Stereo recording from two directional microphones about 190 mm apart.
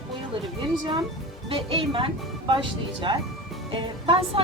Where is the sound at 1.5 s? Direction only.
30° right (ahead or behind).